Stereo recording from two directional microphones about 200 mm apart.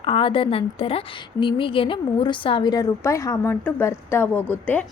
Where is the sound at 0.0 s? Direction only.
25° left (ahead or behind).